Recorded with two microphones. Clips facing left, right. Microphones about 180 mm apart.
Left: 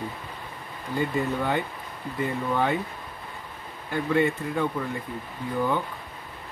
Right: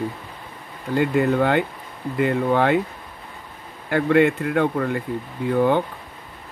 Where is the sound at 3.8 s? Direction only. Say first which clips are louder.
Right 7 dB; 70° right (ahead or behind).